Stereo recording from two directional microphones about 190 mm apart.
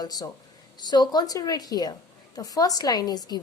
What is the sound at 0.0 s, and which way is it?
A woman's voice, 20° left (ahead or behind).